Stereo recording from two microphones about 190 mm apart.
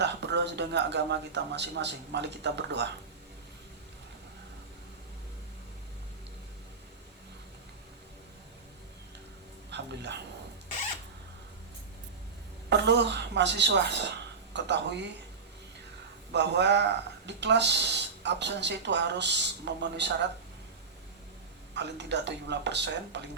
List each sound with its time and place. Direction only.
0.0 s speech: 65° right (ahead or behind)
9.6 s music: 65° right (ahead or behind)
12.7 s speech: 65° right (ahead or behind)
16.3 s speech: 65° right (ahead or behind)
21.8 s speech: 65° right (ahead or behind)